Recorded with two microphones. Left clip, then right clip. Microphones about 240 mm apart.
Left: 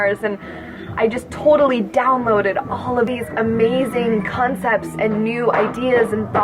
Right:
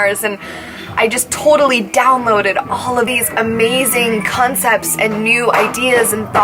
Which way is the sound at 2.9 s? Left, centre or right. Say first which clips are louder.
Right 4 dB; centre.